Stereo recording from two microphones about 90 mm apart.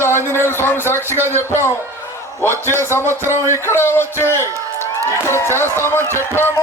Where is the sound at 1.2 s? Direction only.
25° right (ahead or behind).